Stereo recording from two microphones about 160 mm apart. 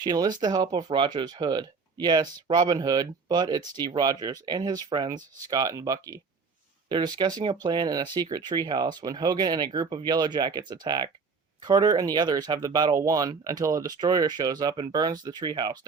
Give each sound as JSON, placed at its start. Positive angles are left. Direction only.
{"t": 0.0, "sound": "speech", "side_deg": -25}